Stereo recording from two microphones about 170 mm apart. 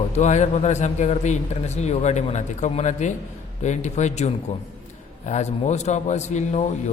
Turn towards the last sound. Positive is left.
turn(degrees=40)  # may be behind; listen again after turning